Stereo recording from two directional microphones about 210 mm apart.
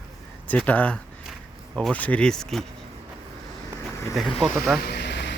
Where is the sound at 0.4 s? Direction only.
5° left (ahead or behind).